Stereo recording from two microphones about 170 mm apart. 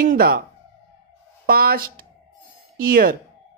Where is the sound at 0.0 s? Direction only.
55° right (ahead or behind).